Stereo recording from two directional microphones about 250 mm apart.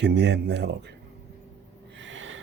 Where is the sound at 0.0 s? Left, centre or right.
Right.